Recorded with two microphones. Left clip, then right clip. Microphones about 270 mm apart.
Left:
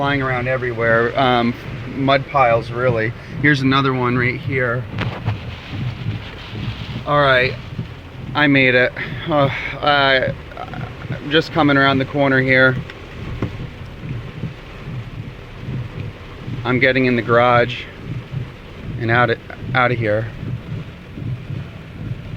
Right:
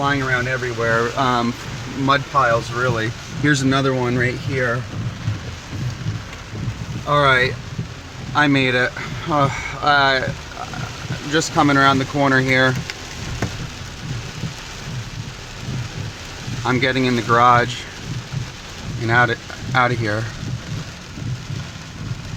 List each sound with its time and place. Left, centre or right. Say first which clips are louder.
0.0 s speech: even; centre
7.1 s speech: left 1 dB; centre
11.3 s speech: left 1 dB; centre
16.6 s speech: left 3 dB; centre
19.0 s speech: left 1 dB; centre